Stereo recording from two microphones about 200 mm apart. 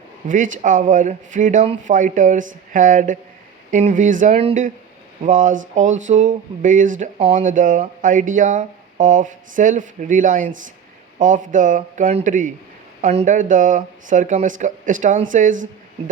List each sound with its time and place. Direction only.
0.3 s speech: 40° right (ahead or behind)